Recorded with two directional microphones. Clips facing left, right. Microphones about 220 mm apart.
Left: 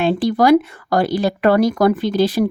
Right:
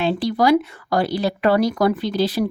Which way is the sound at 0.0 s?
50° left (ahead or behind).